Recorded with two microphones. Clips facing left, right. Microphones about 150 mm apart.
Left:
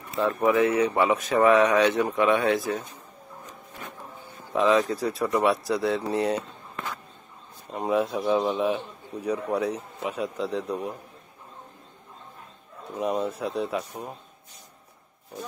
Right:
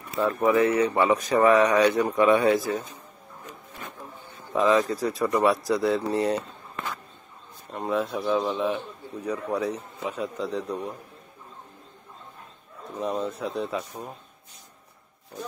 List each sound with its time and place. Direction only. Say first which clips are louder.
0.2 s speech: even; centre (ahead or behind)
4.5 s speech: even; centre (ahead or behind)
7.8 s a man's voice: left 2 dB; 15° left (ahead or behind)
13.4 s a man's voice: left 1 dB; 5° left (ahead or behind)